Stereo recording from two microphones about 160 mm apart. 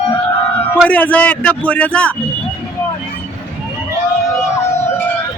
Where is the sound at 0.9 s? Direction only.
10° left (ahead or behind).